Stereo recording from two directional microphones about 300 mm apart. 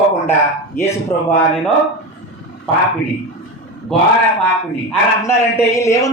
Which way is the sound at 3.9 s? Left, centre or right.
Centre.